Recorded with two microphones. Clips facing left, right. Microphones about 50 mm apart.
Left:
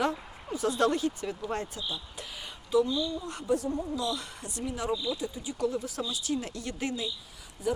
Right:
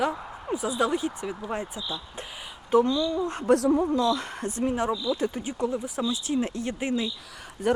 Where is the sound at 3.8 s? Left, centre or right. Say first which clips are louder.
Right 8 dB; right.